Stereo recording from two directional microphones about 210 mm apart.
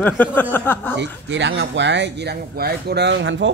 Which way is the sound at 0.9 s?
55° right (ahead or behind).